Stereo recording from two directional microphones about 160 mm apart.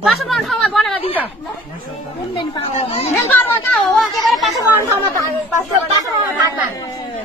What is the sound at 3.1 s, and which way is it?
Speech, 10° left (ahead or behind).